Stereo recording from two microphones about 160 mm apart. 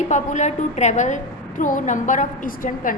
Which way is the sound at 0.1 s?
50° left (ahead or behind).